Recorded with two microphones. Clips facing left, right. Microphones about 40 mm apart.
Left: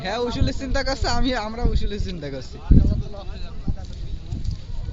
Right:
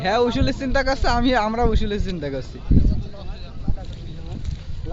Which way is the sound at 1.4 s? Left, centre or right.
Right.